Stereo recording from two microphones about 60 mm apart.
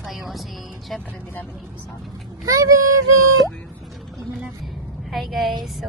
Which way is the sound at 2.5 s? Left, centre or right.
Right.